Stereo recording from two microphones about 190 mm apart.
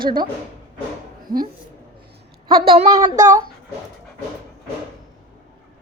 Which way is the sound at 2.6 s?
30° right (ahead or behind).